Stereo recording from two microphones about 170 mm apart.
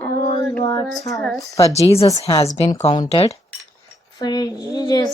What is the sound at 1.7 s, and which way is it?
Speech, 35° left (ahead or behind).